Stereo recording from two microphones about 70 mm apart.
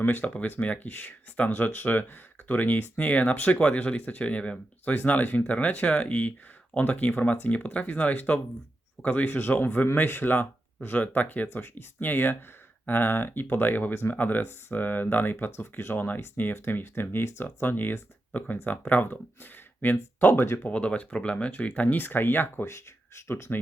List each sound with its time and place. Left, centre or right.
0.0 s speech: left
20.7 s speech: centre
22.6 s speech: left